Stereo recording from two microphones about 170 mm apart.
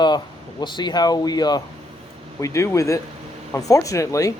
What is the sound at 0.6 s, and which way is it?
Speech, 25° left (ahead or behind).